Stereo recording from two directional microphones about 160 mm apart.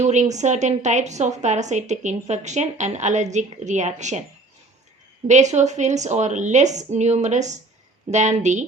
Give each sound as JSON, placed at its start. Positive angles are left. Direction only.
{"t": 0.0, "sound": "a woman's voice", "side_deg": -45}
{"t": 5.3, "sound": "a woman's voice", "side_deg": -45}